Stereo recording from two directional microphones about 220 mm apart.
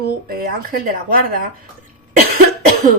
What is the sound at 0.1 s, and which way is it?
Speech, 40° right (ahead or behind).